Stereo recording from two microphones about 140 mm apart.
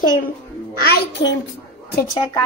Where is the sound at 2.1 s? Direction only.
35° left (ahead or behind).